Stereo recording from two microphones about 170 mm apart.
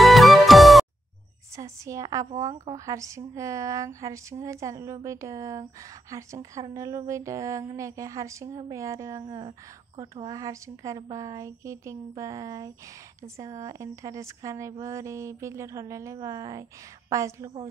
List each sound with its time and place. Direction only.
0.0 s music: centre (ahead or behind)
1.6 s a woman's voice: 20° right (ahead or behind)
13.4 s a sound: 20° right (ahead or behind)